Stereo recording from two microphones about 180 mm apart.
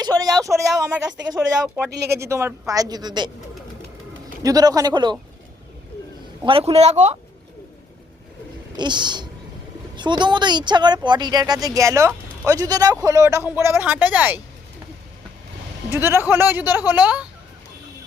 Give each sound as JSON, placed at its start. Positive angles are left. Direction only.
{"t": 0.0, "sound": "a sound", "side_deg": -20}
{"t": 1.3, "sound": "speech", "side_deg": -15}
{"t": 4.4, "sound": "speech", "side_deg": -20}
{"t": 6.4, "sound": "speech", "side_deg": -30}
{"t": 8.7, "sound": "speech", "side_deg": -25}
{"t": 15.9, "sound": "speech", "side_deg": -15}